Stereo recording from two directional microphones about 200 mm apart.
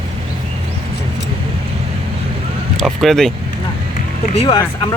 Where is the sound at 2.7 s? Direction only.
Centre (ahead or behind).